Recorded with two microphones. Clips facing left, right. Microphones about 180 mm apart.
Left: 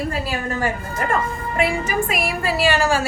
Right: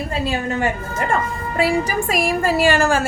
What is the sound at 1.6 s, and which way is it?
A woman's voice, 40° right (ahead or behind).